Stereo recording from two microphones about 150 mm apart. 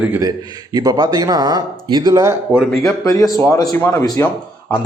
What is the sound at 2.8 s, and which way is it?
Speech, 25° left (ahead or behind).